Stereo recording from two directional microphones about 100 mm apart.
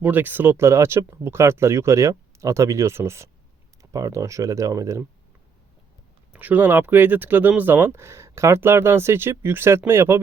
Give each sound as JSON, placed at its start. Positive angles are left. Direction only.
{"t": 0.0, "sound": "speech", "side_deg": -15}
{"t": 6.3, "sound": "speech", "side_deg": -15}